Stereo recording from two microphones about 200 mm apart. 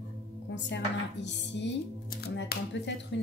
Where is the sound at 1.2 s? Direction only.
60° left (ahead or behind).